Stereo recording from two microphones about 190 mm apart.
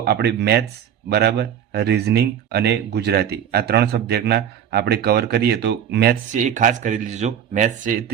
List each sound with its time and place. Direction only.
0.0 s speech: 60° right (ahead or behind)
6.3 s speech: 40° right (ahead or behind)